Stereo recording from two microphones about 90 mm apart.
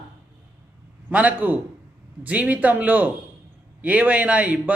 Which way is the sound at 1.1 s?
15° right (ahead or behind).